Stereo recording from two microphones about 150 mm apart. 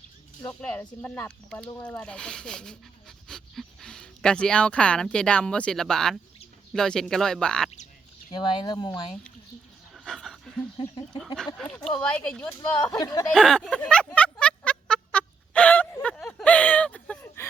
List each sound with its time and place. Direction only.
0.4 s speech: 15° left (ahead or behind)
8.3 s speech: 30° left (ahead or behind)
9.9 s dog: 5° left (ahead or behind)
10.8 s speech: 35° left (ahead or behind)
11.3 s speech: 5° left (ahead or behind)
13.0 s speech: 25° left (ahead or behind)
13.3 s a sound: centre (ahead or behind)